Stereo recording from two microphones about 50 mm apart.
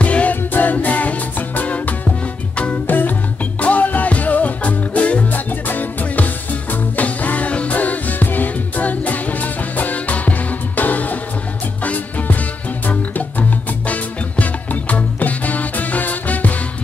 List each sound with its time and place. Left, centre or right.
0.0 s music: left
5.3 s music: left